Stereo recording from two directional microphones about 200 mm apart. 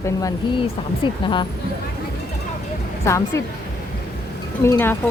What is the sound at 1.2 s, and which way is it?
Speech, 25° left (ahead or behind).